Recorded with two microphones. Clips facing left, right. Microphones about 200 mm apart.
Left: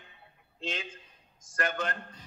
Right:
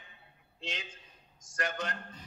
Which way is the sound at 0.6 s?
55° left (ahead or behind).